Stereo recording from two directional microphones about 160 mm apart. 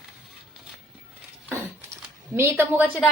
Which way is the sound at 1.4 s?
15° right (ahead or behind).